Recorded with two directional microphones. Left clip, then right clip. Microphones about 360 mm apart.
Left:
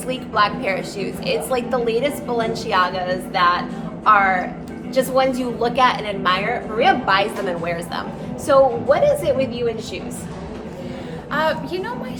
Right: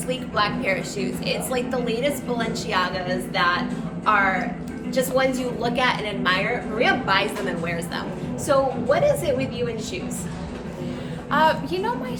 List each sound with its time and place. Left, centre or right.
0.1 s a woman's voice: centre
11.3 s a woman's voice: centre